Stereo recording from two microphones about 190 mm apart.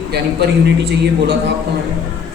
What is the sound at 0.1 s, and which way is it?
A man's voice, 60° right (ahead or behind).